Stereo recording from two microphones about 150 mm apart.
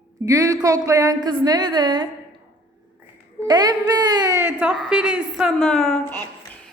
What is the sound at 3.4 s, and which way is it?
Speech, 30° right (ahead or behind).